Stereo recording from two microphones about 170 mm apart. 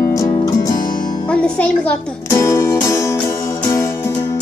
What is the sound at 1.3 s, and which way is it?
Music, 5° left (ahead or behind).